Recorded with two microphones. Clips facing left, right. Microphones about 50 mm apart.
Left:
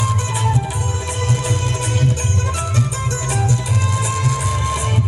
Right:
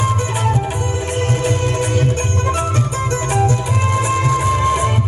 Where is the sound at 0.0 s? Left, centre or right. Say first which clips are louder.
Right 2 dB; right.